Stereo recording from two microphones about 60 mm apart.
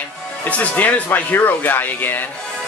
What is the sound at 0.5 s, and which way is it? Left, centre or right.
Speech, left.